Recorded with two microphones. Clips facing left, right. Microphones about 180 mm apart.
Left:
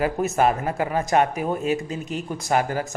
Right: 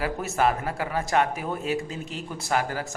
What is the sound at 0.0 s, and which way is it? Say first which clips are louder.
A man's voice: left 4 dB; 20° left (ahead or behind).